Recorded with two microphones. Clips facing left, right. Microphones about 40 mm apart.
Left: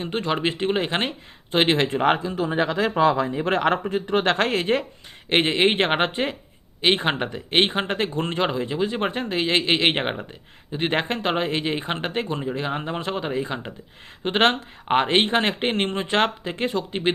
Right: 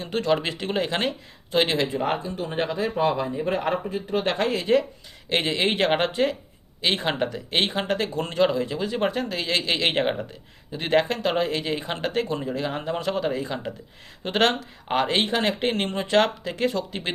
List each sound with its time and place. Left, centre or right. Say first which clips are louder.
0.0 s speech: even; left
1.9 s speech: left 5 dB; left
4.6 s speech: right 2 dB; left